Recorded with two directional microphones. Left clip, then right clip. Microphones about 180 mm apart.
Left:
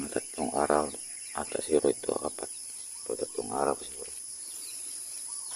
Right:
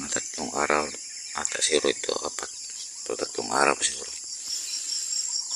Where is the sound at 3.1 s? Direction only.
15° right (ahead or behind).